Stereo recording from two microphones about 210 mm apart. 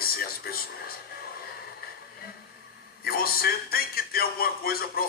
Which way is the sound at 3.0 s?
45° left (ahead or behind).